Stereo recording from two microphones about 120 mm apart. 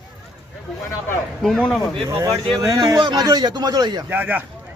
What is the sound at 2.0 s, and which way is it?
A man's voice, 25° right (ahead or behind).